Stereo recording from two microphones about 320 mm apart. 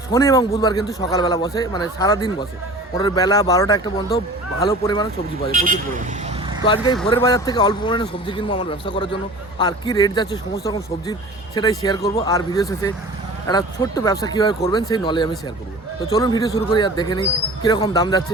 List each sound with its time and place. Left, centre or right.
0.1 s a man's voice: centre
5.5 s speech: right
6.7 s a man's voice: centre